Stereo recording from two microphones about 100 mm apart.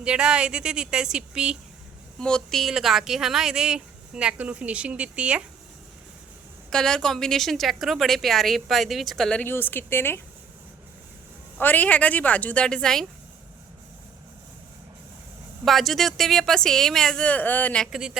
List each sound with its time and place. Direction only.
0.0 s speech: 10° right (ahead or behind)
2.1 s speech: 5° left (ahead or behind); by 5.4 s 10° right (ahead or behind)
6.7 s a woman's voice: 5° left (ahead or behind)
9.4 s speech: 20° left (ahead or behind)
11.5 s speech: 15° left (ahead or behind)
15.6 s a woman's voice: centre (ahead or behind)
17.9 s speech: 5° right (ahead or behind)